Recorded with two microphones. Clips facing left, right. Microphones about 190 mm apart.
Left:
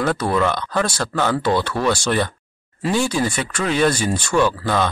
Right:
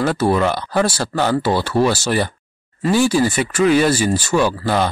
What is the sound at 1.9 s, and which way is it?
Speech, 5° right (ahead or behind).